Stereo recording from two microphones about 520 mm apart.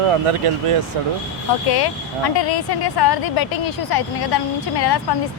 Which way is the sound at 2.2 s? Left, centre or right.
Left.